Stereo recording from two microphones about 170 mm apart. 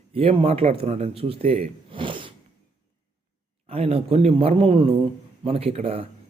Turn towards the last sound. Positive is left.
turn(degrees=-35)  # may be behind; listen again after turning